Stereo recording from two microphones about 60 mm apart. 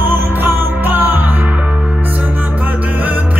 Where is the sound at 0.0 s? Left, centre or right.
Right.